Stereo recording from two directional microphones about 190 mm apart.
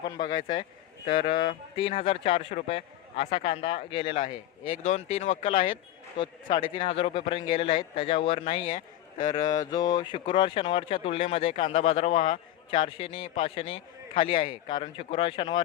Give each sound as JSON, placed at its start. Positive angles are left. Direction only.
{"t": 0.0, "sound": "speech", "side_deg": 20}
{"t": 9.2, "sound": "speech", "side_deg": 20}
{"t": 12.7, "sound": "speech", "side_deg": 30}